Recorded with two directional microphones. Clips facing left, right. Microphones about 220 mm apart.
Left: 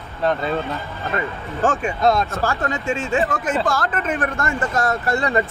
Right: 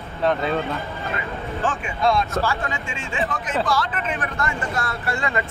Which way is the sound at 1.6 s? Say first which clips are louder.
Left 6 dB; 45° left (ahead or behind).